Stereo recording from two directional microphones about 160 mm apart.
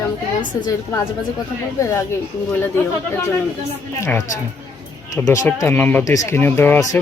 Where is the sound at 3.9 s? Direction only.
15° left (ahead or behind).